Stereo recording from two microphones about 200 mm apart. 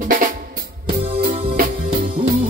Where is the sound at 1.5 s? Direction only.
45° right (ahead or behind).